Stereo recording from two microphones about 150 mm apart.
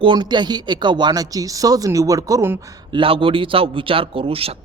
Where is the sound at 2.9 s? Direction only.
35° right (ahead or behind).